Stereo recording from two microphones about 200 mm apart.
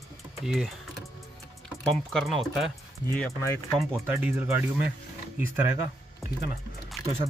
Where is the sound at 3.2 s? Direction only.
15° left (ahead or behind).